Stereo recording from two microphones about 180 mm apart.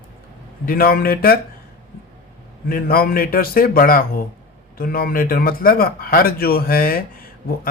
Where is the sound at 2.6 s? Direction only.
55° left (ahead or behind).